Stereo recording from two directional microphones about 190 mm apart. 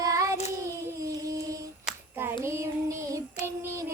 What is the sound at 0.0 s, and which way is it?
Child singing, 15° right (ahead or behind).